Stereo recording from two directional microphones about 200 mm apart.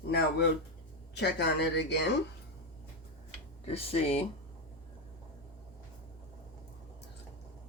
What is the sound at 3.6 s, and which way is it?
Speech, 30° left (ahead or behind).